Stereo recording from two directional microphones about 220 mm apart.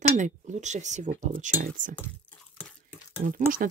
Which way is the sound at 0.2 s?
30° right (ahead or behind).